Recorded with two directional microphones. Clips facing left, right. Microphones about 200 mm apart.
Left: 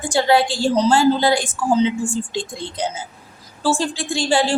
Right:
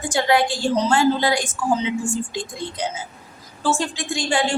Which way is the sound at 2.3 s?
30° left (ahead or behind).